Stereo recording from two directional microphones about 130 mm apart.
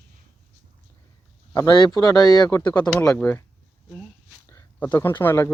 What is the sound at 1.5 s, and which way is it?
Speech, 35° left (ahead or behind).